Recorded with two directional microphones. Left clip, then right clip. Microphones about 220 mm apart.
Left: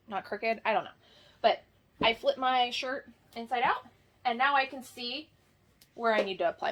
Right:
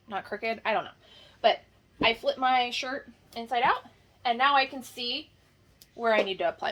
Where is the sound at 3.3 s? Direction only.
15° left (ahead or behind).